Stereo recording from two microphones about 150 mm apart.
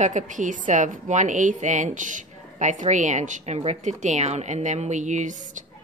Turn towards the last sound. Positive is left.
turn(degrees=-55)  # may be behind; listen again after turning